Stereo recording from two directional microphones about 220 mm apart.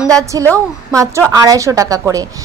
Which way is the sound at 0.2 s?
15° right (ahead or behind).